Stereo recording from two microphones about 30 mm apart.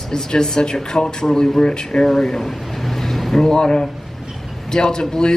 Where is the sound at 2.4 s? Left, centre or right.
Centre.